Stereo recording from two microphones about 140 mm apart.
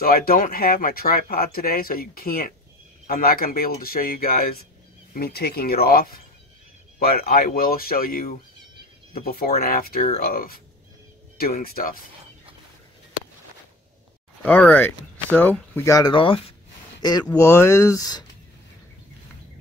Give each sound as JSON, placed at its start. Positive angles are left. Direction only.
{"t": 0.0, "sound": "speech", "side_deg": 90}
{"t": 14.4, "sound": "speech", "side_deg": 10}
{"t": 16.1, "sound": "speech", "side_deg": 40}
{"t": 17.4, "sound": "speech", "side_deg": 20}